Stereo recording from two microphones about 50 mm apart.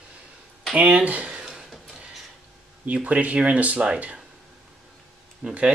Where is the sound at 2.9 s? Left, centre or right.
Right.